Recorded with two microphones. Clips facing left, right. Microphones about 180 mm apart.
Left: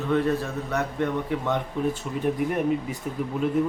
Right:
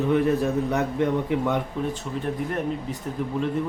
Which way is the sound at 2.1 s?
5° left (ahead or behind).